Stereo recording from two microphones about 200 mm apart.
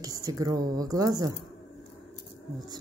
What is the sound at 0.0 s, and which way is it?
Speech, 20° right (ahead or behind).